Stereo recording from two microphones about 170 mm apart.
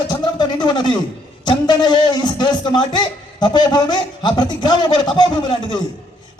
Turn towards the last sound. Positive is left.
turn(degrees=25)  # may be behind; listen again after turning